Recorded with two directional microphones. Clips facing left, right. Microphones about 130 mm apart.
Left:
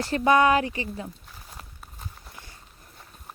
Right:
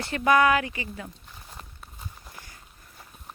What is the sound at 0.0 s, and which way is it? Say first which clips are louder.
Speech: left 1 dB; 30° left (ahead or behind).